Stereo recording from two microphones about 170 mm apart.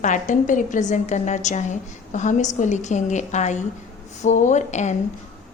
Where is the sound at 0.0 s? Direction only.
45° left (ahead or behind).